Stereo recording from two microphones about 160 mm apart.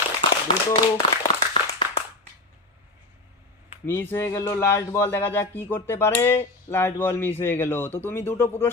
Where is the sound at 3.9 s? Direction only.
15° left (ahead or behind).